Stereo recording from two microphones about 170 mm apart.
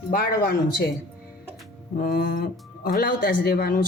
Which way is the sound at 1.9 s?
55° left (ahead or behind).